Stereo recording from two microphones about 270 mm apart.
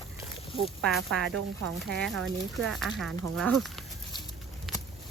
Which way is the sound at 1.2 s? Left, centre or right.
Right.